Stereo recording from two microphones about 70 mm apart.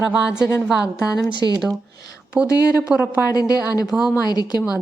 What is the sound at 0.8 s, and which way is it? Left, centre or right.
Speech, left.